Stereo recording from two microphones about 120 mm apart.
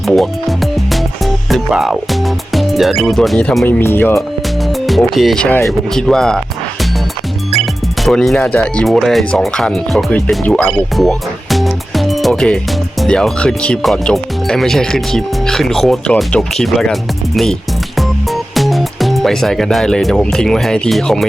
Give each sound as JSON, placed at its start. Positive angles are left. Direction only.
{"t": 0.1, "sound": "music", "side_deg": 0}
{"t": 2.5, "sound": "speech", "side_deg": 0}
{"t": 3.6, "sound": "speech", "side_deg": 20}
{"t": 4.9, "sound": "speech", "side_deg": 0}
{"t": 7.5, "sound": "music", "side_deg": 0}
{"t": 8.5, "sound": "speech", "side_deg": 10}
{"t": 10.7, "sound": "music", "side_deg": 0}
{"t": 13.0, "sound": "speech", "side_deg": 5}
{"t": 17.9, "sound": "music", "side_deg": 0}